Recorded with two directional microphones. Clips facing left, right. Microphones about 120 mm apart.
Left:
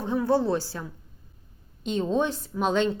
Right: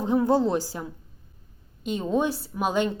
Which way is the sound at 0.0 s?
15° right (ahead or behind).